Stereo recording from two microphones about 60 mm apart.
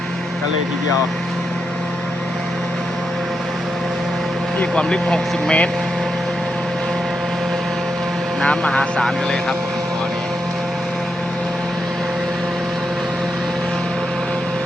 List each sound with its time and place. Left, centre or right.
4.6 s speech: centre
8.4 s speech: centre